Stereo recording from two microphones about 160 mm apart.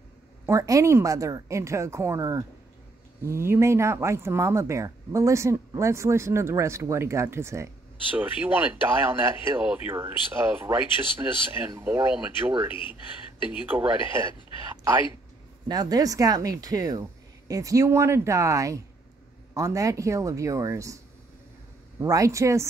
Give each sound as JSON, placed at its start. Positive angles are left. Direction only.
{"t": 0.5, "sound": "a woman's voice", "side_deg": -20}
{"t": 15.7, "sound": "a woman's voice", "side_deg": -25}
{"t": 22.0, "sound": "a woman's voice", "side_deg": -20}